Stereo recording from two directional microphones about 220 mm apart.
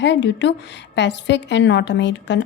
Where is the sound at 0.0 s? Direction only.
55° left (ahead or behind).